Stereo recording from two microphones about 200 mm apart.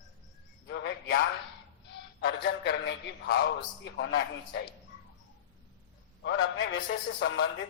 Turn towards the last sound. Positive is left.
turn(degrees=65)  # may be behind; listen again after turning